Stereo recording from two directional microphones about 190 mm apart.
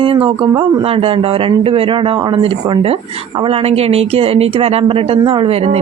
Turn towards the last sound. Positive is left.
turn(degrees=-30)  # may be behind; listen again after turning